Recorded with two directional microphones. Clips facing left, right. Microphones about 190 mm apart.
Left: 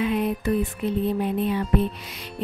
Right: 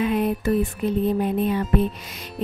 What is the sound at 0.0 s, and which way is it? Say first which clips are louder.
Speech: right 2 dB; 45° right (ahead or behind).